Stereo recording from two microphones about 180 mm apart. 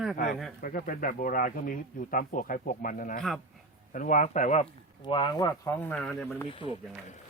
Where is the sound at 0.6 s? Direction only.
50° left (ahead or behind).